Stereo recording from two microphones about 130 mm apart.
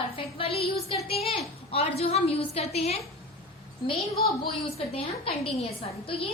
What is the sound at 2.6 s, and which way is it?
Speech, 50° left (ahead or behind).